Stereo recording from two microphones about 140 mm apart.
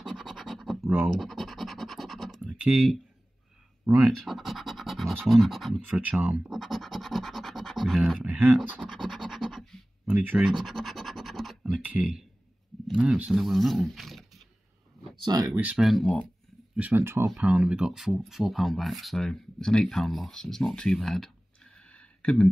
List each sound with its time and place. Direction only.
0.0 s scratch: centre (ahead or behind)
0.8 s speech: 15° right (ahead or behind)
1.2 s scratch: centre (ahead or behind)
2.4 s typing: 10° right (ahead or behind)
4.0 s speech: centre (ahead or behind)
5.9 s scratch: 10° right (ahead or behind)
10.0 s speech: 10° right (ahead or behind)
10.6 s scratch: centre (ahead or behind)
11.8 s speech: 10° right (ahead or behind)
15.1 s speech: 30° right (ahead or behind)
15.5 s speech: 10° right (ahead or behind)
16.7 s speech: 10° right (ahead or behind)
17.3 s speech: 5° right (ahead or behind)